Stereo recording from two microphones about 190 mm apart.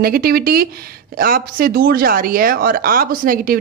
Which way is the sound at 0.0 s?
50° right (ahead or behind).